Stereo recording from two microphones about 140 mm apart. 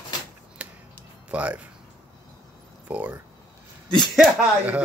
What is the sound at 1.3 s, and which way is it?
Speech, 10° right (ahead or behind).